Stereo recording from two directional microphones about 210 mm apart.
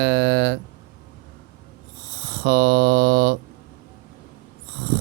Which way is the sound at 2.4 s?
60° right (ahead or behind).